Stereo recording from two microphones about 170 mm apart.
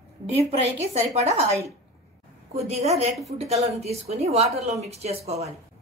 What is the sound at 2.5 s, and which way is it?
A woman's voice, 40° right (ahead or behind).